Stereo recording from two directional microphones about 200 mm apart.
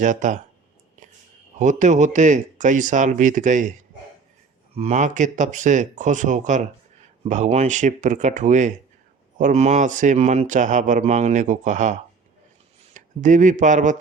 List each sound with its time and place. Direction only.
0.0 s a man's voice: 40° right (ahead or behind)
1.5 s a man's voice: 40° right (ahead or behind)